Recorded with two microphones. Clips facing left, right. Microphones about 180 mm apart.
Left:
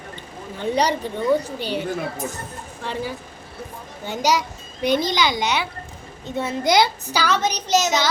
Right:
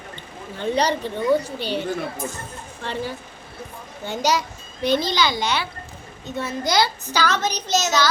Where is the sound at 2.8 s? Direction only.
5° left (ahead or behind).